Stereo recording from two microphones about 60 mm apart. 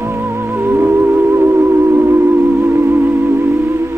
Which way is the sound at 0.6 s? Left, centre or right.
Right.